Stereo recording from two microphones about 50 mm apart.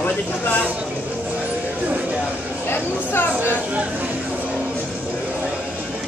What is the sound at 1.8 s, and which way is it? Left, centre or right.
Music, right.